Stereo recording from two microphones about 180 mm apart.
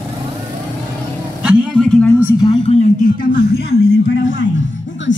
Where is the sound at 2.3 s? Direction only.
20° left (ahead or behind).